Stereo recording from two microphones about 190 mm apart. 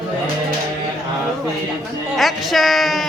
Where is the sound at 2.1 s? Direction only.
Centre (ahead or behind).